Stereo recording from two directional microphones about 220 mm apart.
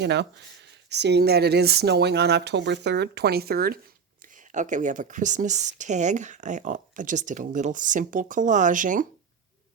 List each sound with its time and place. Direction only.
0.0 s speech: 50° right (ahead or behind)